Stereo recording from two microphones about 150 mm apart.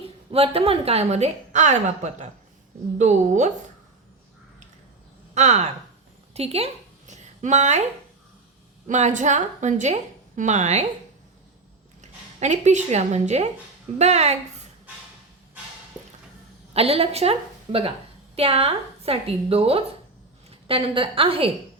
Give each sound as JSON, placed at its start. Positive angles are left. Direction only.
{"t": 0.3, "sound": "a woman's voice", "side_deg": -40}
{"t": 5.3, "sound": "a woman's voice", "side_deg": -50}
{"t": 7.1, "sound": "a sound", "side_deg": -50}
{"t": 8.9, "sound": "a woman's voice", "side_deg": -55}
{"t": 12.4, "sound": "a woman's voice", "side_deg": -50}
{"t": 16.7, "sound": "a woman's voice", "side_deg": -40}